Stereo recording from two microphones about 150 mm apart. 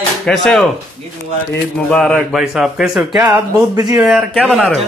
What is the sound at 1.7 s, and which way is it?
Speech, centre (ahead or behind).